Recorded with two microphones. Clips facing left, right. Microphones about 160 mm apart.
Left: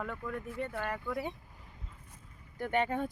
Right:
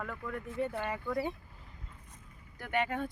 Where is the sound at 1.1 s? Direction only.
Centre (ahead or behind).